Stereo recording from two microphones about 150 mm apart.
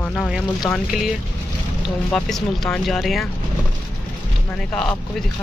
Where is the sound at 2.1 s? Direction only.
Centre (ahead or behind).